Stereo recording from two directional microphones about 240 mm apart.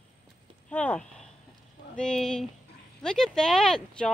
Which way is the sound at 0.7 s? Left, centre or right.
Centre.